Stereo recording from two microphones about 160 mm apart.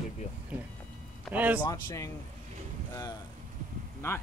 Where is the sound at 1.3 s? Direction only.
10° right (ahead or behind).